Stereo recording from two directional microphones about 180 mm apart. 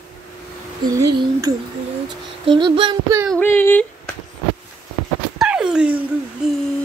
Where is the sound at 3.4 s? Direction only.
10° left (ahead or behind).